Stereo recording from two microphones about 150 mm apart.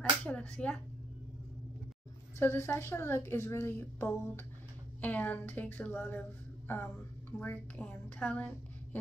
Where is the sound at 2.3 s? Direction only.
15° left (ahead or behind).